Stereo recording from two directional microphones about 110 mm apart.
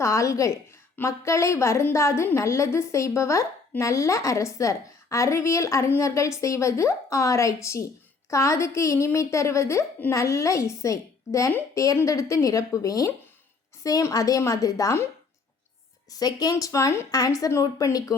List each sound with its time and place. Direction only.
0.0 s a woman's voice: 30° left (ahead or behind)
16.1 s speech: 35° left (ahead or behind)